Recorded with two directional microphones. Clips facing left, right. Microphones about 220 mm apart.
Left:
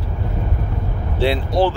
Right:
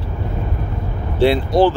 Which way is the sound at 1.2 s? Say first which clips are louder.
Right 4 dB; 50° right (ahead or behind).